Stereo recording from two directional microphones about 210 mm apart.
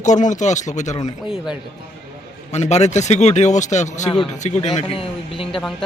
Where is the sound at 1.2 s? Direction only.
Centre (ahead or behind).